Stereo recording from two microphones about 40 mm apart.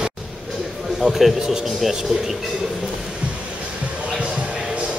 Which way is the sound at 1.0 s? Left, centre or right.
Centre.